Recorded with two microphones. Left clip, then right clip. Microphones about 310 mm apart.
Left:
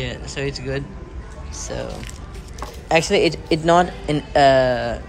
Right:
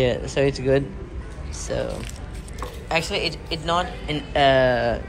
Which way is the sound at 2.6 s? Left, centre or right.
Centre.